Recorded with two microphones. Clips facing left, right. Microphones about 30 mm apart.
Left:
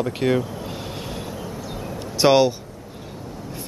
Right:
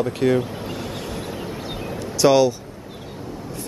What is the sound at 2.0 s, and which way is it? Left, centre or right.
Speech, left.